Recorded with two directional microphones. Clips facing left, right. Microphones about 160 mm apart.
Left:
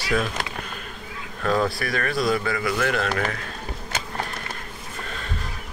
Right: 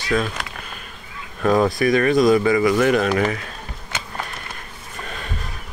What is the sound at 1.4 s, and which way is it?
Speech, 20° right (ahead or behind).